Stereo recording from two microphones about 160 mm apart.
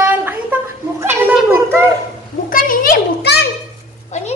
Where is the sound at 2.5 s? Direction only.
60° left (ahead or behind).